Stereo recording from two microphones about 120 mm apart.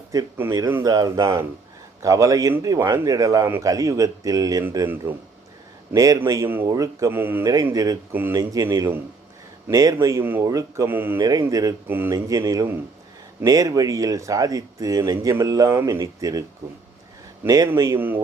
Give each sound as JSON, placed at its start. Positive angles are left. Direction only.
{"t": 0.3, "sound": "speech", "side_deg": -20}
{"t": 0.9, "sound": "speech", "side_deg": -30}
{"t": 5.0, "sound": "speech", "side_deg": -20}
{"t": 5.9, "sound": "speech", "side_deg": -30}
{"t": 7.4, "sound": "speech", "side_deg": -30}
{"t": 8.1, "sound": "speech", "side_deg": -15}
{"t": 9.6, "sound": "speech", "side_deg": -30}
{"t": 10.8, "sound": "speech", "side_deg": -15}
{"t": 11.2, "sound": "speech", "side_deg": -30}
{"t": 11.9, "sound": "speech", "side_deg": -15}
{"t": 12.1, "sound": "speech", "side_deg": -30}
{"t": 17.4, "sound": "a man's voice", "side_deg": -30}